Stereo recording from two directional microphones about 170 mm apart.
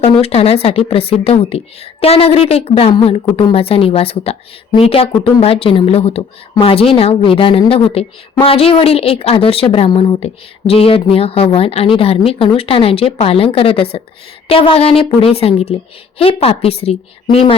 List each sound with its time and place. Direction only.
0.0 s speech: 35° left (ahead or behind)